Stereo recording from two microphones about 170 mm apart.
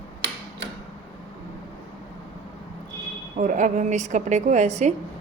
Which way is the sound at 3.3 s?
50° right (ahead or behind).